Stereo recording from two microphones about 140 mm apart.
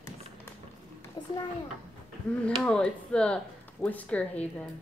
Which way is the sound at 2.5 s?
5° left (ahead or behind).